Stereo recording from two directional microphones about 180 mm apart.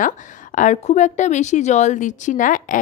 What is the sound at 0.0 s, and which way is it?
A woman's voice, 45° left (ahead or behind).